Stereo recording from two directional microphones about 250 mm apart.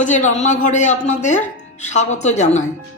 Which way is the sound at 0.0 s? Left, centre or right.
Left.